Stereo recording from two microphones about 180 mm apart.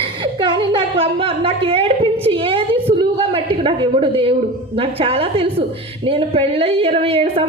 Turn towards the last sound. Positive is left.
turn(degrees=-30)  # may be behind; listen again after turning